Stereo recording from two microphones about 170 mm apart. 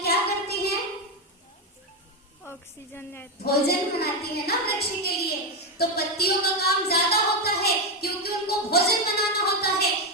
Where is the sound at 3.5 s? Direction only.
65° left (ahead or behind).